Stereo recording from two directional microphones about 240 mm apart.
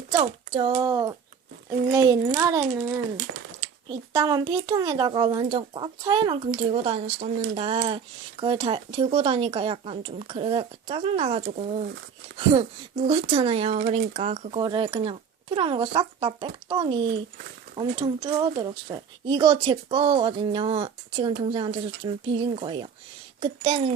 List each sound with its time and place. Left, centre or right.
0.1 s a child's voice: centre